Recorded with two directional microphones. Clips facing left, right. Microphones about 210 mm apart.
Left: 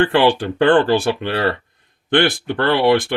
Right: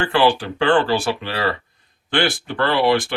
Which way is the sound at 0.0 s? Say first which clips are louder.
Left 3 dB; 55° left (ahead or behind).